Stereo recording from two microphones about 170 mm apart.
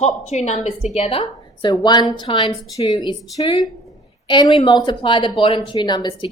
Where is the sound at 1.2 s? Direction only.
25° left (ahead or behind).